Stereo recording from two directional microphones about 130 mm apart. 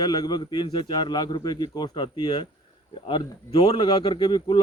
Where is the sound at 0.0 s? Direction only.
30° left (ahead or behind).